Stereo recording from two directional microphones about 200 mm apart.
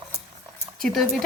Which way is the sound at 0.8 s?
Centre (ahead or behind).